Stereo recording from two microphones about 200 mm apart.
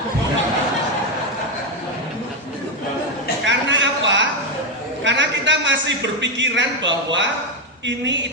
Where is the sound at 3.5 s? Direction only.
65° right (ahead or behind).